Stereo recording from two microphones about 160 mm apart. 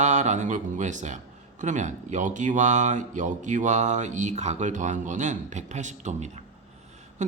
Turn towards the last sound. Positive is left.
turn(degrees=-50)  # may be behind; listen again after turning